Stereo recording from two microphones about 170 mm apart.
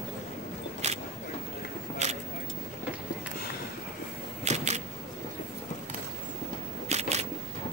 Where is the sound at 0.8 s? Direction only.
40° right (ahead or behind).